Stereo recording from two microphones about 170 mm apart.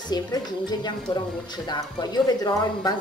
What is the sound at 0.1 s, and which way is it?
Speech, 25° left (ahead or behind).